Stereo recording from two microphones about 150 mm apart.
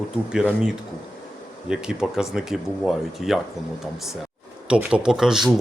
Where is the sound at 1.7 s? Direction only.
5° right (ahead or behind).